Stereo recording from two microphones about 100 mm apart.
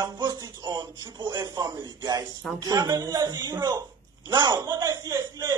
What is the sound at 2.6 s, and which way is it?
Music, 40° right (ahead or behind).